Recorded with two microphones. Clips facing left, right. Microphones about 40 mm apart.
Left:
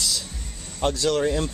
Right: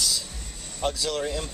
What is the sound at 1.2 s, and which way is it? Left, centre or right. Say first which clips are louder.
Speech: left 6 dB; left.